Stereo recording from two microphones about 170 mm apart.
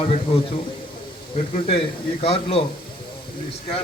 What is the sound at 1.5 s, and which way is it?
Speech, 35° left (ahead or behind).